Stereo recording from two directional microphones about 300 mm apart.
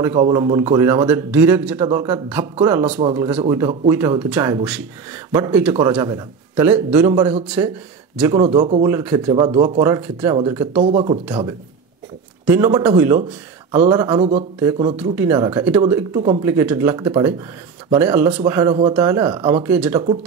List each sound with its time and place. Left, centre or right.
0.1 s a man's voice: centre
8.8 s a man's voice: centre
10.8 s speech: right
12.4 s a man's voice: centre